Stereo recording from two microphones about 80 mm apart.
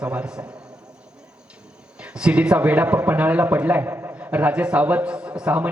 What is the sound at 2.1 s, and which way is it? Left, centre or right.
A man's voice, centre.